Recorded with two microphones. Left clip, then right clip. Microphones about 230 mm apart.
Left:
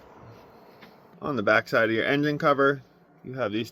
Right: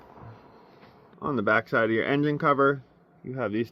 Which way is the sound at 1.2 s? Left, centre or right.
Centre.